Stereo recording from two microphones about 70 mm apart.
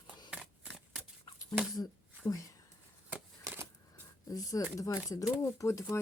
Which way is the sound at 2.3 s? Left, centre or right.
Left.